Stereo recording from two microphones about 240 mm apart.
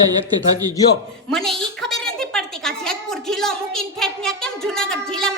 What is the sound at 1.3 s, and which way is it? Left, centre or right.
A woman's voice, centre.